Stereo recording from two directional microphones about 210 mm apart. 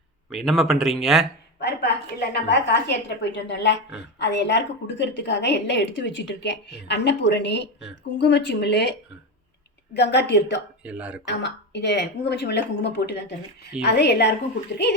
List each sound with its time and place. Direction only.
0.3 s speech: centre (ahead or behind)
1.5 s a woman's voice: 55° left (ahead or behind)
10.8 s speech: 5° right (ahead or behind)
11.3 s a woman's voice: 55° left (ahead or behind)